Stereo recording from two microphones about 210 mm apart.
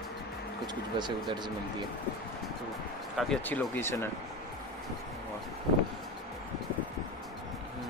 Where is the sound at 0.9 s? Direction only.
20° right (ahead or behind).